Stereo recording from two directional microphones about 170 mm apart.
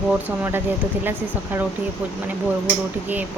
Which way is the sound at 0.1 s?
10° right (ahead or behind).